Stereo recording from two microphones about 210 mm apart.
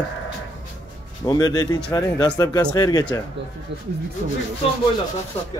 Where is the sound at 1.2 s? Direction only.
20° left (ahead or behind).